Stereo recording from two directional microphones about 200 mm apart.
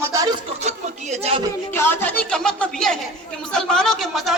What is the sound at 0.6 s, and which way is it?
Speech, 35° right (ahead or behind).